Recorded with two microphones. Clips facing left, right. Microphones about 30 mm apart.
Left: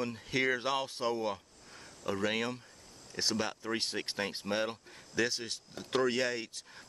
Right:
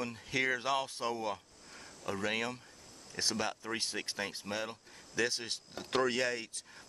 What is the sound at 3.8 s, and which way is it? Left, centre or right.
Speech, left.